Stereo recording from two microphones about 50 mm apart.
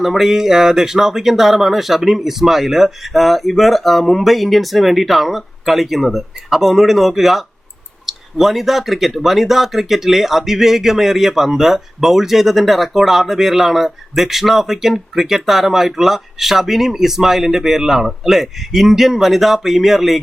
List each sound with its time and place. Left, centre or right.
0.0 s speech: centre